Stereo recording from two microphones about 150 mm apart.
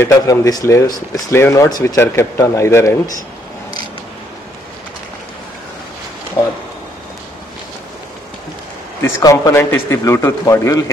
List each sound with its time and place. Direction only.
0.0 s speech: 20° left (ahead or behind)
9.0 s speech: 20° left (ahead or behind)